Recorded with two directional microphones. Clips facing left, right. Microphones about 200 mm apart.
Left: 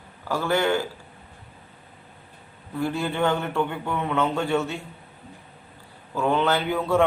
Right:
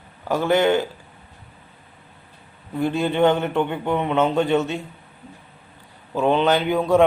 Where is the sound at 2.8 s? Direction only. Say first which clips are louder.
Right 6 dB; 20° right (ahead or behind).